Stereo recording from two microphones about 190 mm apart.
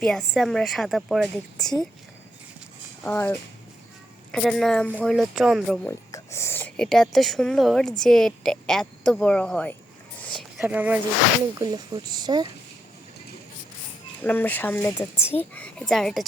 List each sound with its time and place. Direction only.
0.0 s a woman's voice: centre (ahead or behind)
3.0 s speech: 10° left (ahead or behind)
4.3 s a woman's voice: centre (ahead or behind)
6.1 s a woman's voice: 15° left (ahead or behind)
10.6 s speech: 5° right (ahead or behind)
11.6 s speech: 20° right (ahead or behind)
14.3 s a woman's voice: 10° left (ahead or behind)